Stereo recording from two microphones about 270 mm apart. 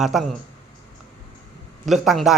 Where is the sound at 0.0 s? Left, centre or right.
Centre.